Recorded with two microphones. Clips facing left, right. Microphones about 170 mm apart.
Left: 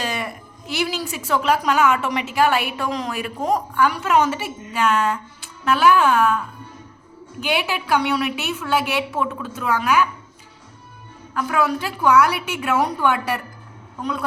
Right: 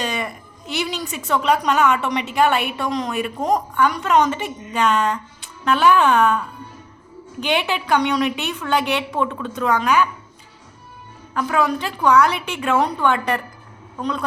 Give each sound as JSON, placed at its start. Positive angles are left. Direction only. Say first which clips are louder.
{"t": 0.0, "sound": "a woman's voice", "louder": "right 1 dB", "side_deg": 5}
{"t": 11.3, "sound": "a woman's voice", "louder": "right 1 dB", "side_deg": 5}